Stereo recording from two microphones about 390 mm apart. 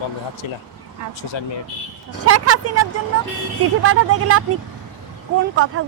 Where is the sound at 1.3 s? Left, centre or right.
Left.